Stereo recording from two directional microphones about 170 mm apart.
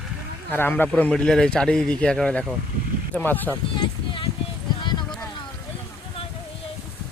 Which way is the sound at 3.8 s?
30° left (ahead or behind).